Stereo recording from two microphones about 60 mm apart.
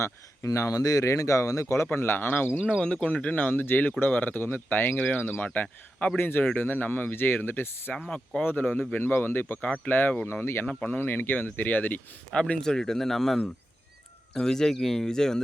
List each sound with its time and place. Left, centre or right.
0.0 s speech: left
1.0 s speech: left
1.6 s speech: left
2.8 s speech: left
8.1 s speech: centre
8.4 s speech: left
10.4 s speech: left
12.5 s speech: centre